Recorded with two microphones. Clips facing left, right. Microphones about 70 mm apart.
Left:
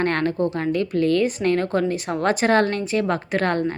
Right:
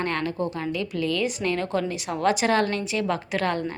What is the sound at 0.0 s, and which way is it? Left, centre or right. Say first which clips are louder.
A woman's voice: left 5 dB; left.